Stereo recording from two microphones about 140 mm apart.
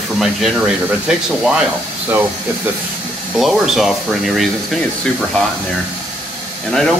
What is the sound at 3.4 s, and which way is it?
Speech, centre (ahead or behind).